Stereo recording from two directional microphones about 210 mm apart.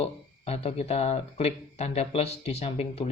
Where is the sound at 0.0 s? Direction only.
30° left (ahead or behind).